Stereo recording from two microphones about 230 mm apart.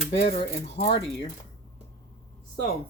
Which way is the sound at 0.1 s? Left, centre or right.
Left.